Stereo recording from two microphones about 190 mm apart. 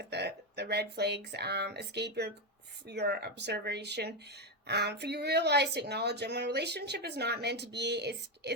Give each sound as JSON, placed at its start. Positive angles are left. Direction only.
{"t": 0.0, "sound": "speech", "side_deg": -60}